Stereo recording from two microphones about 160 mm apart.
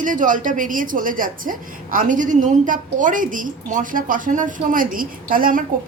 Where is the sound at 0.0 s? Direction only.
55° right (ahead or behind).